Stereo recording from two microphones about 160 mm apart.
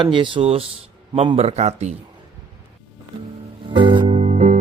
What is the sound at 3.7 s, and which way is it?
Music, 30° right (ahead or behind).